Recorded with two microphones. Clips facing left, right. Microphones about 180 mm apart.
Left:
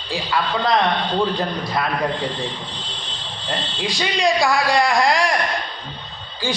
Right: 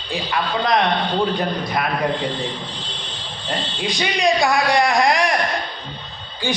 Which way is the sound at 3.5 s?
20° right (ahead or behind).